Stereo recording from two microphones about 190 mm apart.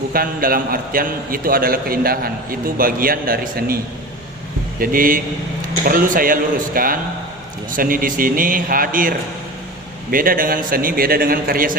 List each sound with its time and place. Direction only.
0.1 s a man's voice: 50° right (ahead or behind)
4.8 s a man's voice: 50° right (ahead or behind)